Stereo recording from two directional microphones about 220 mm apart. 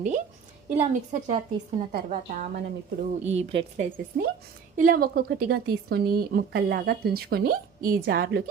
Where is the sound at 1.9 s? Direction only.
40° right (ahead or behind).